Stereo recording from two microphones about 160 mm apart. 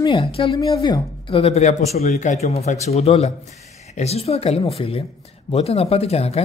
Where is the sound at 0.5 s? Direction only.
25° left (ahead or behind).